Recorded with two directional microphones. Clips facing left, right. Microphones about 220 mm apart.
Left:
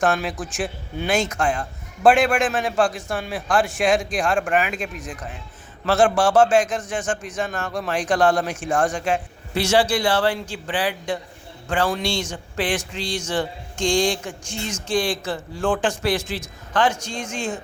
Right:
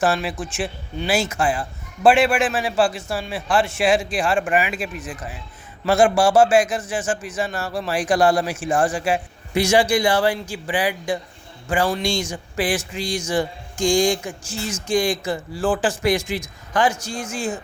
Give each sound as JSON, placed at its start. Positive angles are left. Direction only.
{"t": 0.0, "sound": "a man's voice", "side_deg": -5}